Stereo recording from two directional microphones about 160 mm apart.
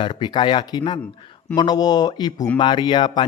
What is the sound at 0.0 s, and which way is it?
Speech, 25° left (ahead or behind).